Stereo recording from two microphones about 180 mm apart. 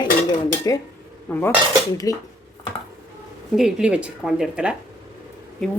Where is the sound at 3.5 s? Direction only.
5° right (ahead or behind).